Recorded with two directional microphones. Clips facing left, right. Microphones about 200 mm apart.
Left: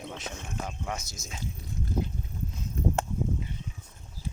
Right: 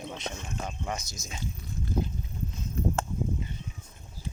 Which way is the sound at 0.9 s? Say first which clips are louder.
Right 1 dB; 5° left (ahead or behind).